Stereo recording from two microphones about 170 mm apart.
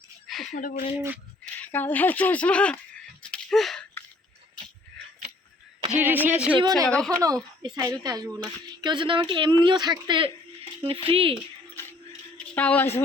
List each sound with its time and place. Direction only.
0.3 s a sound: centre (ahead or behind)
0.5 s speech: 50° left (ahead or behind)
1.6 s a sound: 10° left (ahead or behind)
6.0 s speech: 10° right (ahead or behind)
6.6 s speech: 20° right (ahead or behind)
6.8 s speech: 5° left (ahead or behind)
7.2 s speech: 20° right (ahead or behind)
12.5 s a woman's voice: 10° left (ahead or behind)